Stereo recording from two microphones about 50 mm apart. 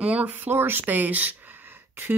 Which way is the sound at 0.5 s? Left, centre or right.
Right.